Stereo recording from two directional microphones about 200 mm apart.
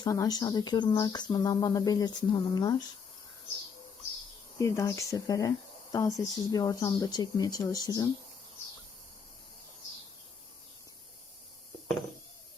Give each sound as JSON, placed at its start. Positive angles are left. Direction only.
{"t": 0.0, "sound": "speech", "side_deg": 20}
{"t": 4.5, "sound": "speech", "side_deg": 15}